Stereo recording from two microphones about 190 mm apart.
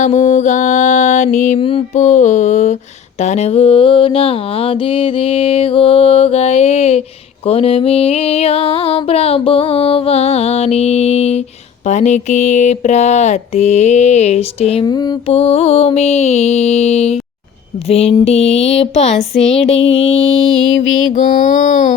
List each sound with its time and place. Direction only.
0.0 s music: 40° left (ahead or behind); by 15.2 s 20° left (ahead or behind)
15.3 s music: 35° left (ahead or behind)
19.8 s music: 75° left (ahead or behind)
21.1 s music: 40° left (ahead or behind)